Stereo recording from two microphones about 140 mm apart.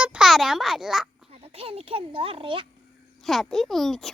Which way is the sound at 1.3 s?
45° right (ahead or behind).